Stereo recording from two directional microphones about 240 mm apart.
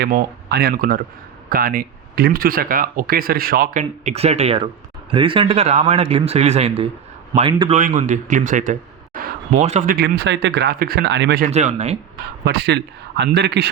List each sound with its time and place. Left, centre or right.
0.0 s a man's voice: right
11.5 s a man's voice: right
12.5 s a man's voice: right